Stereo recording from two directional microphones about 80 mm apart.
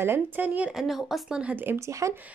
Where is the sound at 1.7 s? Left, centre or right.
Right.